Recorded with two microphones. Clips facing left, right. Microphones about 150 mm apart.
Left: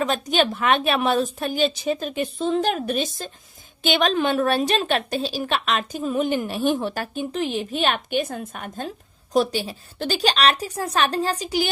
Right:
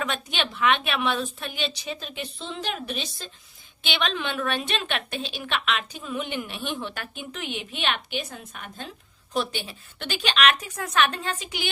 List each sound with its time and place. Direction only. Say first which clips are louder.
0.0 s a woman's voice: left 8 dB; 40° left (ahead or behind)